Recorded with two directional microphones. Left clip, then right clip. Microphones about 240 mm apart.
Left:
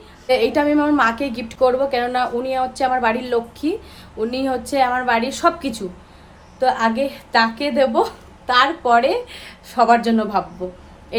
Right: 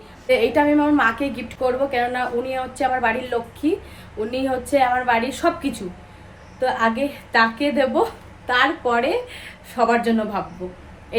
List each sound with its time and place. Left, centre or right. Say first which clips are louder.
0.3 s a woman's voice: even; centre
11.1 s owl: even; centre